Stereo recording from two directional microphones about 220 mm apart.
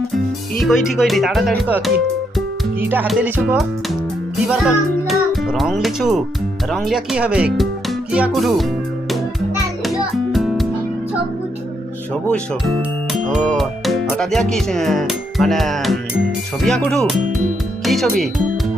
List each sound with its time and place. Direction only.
0.6 s speech: centre (ahead or behind)
2.9 s music: 5° right (ahead or behind)
4.4 s a child's voice: centre (ahead or behind)
10.3 s music: centre (ahead or behind)
12.3 s speech: centre (ahead or behind)